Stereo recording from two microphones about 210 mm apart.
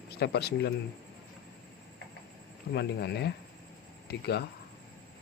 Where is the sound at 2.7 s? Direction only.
55° left (ahead or behind).